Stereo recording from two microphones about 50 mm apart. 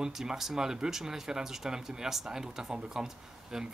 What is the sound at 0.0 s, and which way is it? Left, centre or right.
Speech, centre.